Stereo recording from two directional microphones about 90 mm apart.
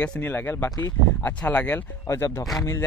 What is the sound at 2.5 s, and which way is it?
Speech, 30° left (ahead or behind).